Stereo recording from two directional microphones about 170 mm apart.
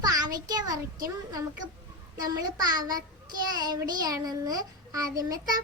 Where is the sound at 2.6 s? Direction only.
20° right (ahead or behind).